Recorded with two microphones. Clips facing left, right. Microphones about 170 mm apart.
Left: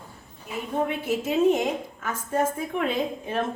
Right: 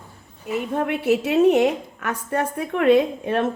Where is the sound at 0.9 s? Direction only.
70° right (ahead or behind).